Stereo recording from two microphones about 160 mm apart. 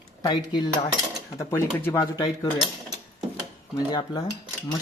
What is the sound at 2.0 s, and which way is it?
Cutlery, 30° left (ahead or behind).